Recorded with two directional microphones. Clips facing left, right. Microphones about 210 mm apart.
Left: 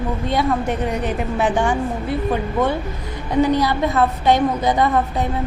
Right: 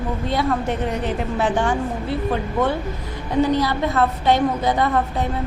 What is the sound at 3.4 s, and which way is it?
A woman's voice, 15° left (ahead or behind).